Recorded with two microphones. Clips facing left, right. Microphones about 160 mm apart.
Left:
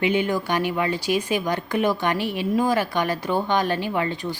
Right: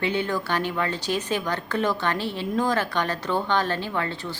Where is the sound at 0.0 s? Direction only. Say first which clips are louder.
Left 4 dB; 15° left (ahead or behind).